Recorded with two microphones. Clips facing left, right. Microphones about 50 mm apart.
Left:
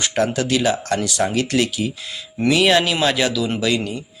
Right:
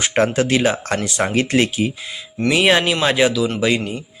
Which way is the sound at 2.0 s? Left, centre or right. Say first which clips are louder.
Even; centre.